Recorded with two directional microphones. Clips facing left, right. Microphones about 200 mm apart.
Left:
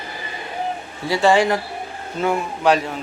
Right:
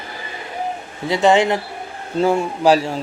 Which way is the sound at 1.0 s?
20° right (ahead or behind).